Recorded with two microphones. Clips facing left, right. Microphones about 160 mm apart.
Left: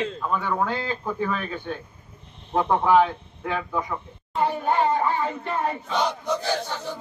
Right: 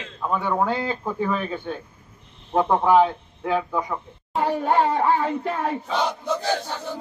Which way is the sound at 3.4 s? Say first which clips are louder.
Right 4 dB; 5° right (ahead or behind).